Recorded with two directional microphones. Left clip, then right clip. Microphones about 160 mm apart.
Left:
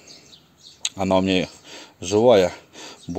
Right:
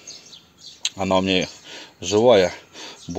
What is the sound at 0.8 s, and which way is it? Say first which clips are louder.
Speech: even; 15° left (ahead or behind).